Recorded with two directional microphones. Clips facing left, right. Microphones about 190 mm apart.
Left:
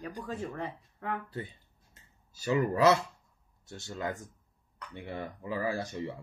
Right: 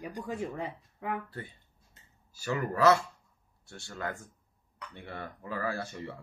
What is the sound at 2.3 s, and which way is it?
Speech, 20° left (ahead or behind).